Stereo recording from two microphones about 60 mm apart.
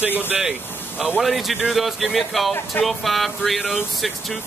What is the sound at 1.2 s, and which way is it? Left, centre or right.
Speech, centre.